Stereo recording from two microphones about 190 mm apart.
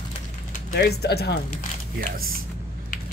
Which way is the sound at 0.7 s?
55° left (ahead or behind).